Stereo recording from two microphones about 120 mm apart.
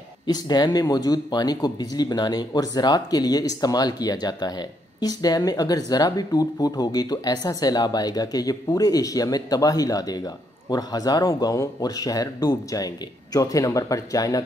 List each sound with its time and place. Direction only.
0.3 s speech: 35° left (ahead or behind)